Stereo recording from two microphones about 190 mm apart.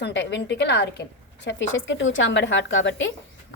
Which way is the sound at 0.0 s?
65° left (ahead or behind).